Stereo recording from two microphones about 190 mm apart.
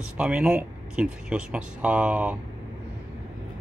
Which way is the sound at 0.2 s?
5° right (ahead or behind).